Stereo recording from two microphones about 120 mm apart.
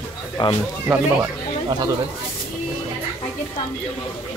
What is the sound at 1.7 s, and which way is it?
Speech, 35° right (ahead or behind).